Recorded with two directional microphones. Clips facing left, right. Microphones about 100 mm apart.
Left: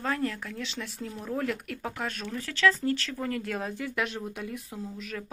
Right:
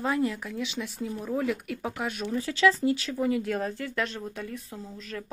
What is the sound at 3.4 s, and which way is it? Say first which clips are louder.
Speech: right 3 dB; centre (ahead or behind).